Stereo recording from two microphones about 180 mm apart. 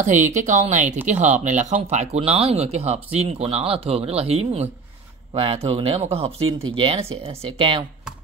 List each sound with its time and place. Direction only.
0.0 s speech: 45° right (ahead or behind)